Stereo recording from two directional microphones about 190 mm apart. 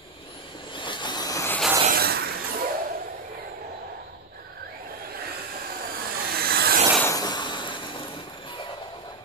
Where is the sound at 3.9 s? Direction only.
50° right (ahead or behind).